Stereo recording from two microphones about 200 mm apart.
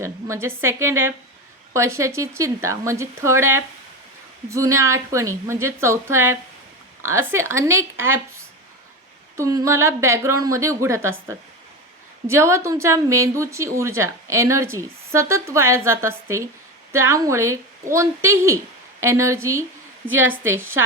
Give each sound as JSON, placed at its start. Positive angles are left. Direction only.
{"t": 0.0, "sound": "a woman's voice", "side_deg": -15}
{"t": 12.3, "sound": "a woman's voice", "side_deg": -15}
{"t": 20.1, "sound": "a woman's voice", "side_deg": -75}
{"t": 20.4, "sound": "a woman's voice", "side_deg": -10}